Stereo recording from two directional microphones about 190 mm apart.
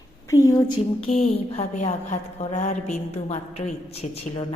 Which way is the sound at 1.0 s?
35° left (ahead or behind).